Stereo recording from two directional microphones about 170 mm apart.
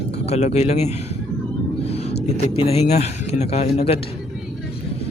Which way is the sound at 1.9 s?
35° left (ahead or behind).